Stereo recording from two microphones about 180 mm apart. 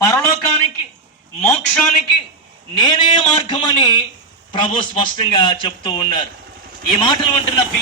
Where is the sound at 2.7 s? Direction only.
25° left (ahead or behind).